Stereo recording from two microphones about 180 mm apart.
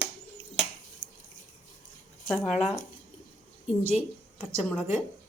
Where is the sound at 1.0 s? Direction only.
45° left (ahead or behind).